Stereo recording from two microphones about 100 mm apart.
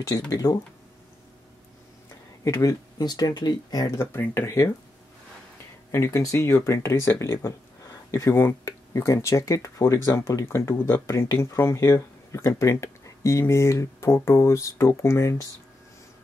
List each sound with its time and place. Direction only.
0.3 s speech: 40° left (ahead or behind)
2.4 s speech: 30° left (ahead or behind)
3.0 s speech: 45° left (ahead or behind)
4.0 s speech: 25° left (ahead or behind)
5.9 s speech: 25° left (ahead or behind)